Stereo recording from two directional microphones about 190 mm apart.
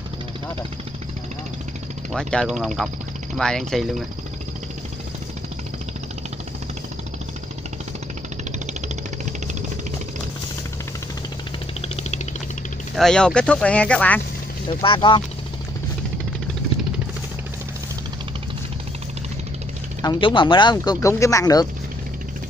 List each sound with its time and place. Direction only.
2.1 s speech: centre (ahead or behind)
12.9 s speech: 5° left (ahead or behind)
14.8 s speech: 25° left (ahead or behind)
20.0 s speech: 25° left (ahead or behind)